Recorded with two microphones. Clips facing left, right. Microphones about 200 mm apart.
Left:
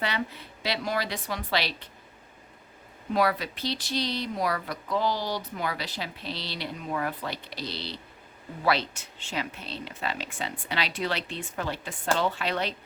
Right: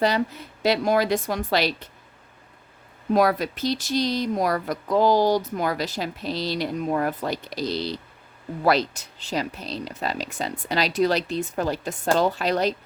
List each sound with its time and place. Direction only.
0.0 s speech: 40° right (ahead or behind)
3.1 s speech: 45° right (ahead or behind)